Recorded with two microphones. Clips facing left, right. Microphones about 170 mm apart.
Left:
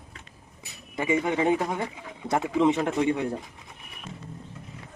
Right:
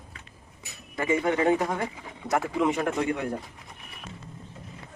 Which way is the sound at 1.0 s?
15° left (ahead or behind).